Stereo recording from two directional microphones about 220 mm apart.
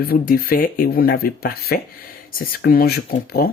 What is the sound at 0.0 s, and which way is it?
Speech, 45° left (ahead or behind).